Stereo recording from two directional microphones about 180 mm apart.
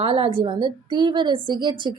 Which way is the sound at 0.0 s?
30° right (ahead or behind).